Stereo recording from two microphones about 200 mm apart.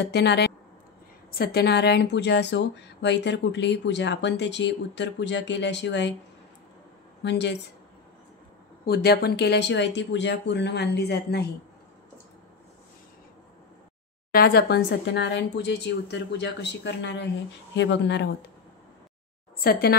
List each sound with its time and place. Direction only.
0.0 s speech: 55° left (ahead or behind)
7.2 s speech: 60° left (ahead or behind)
8.8 s speech: 50° left (ahead or behind)
14.3 s speech: 50° left (ahead or behind)
19.6 s a woman's voice: 50° left (ahead or behind)